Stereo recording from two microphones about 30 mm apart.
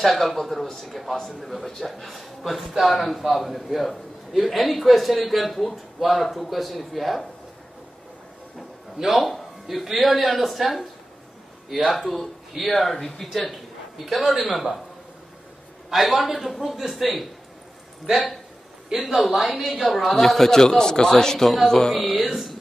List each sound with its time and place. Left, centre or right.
0.0 s a man's voice: centre
9.0 s a man's voice: centre
15.9 s a man's voice: centre
19.2 s a man's voice: centre
20.5 s a man's voice: centre
21.9 s a man's voice: centre